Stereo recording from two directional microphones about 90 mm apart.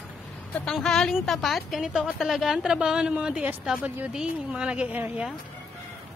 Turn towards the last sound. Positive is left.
turn(degrees=-15)  # may be behind; listen again after turning